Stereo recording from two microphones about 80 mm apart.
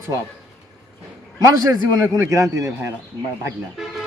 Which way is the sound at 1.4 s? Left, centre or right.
Right.